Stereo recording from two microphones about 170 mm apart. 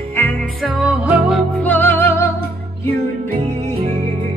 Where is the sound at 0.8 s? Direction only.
5° right (ahead or behind).